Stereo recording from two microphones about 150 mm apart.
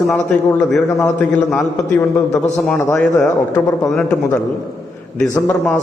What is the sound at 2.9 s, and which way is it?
A man's voice, 15° left (ahead or behind).